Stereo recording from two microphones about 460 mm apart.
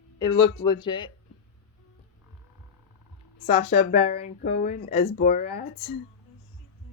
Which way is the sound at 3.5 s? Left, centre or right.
Centre.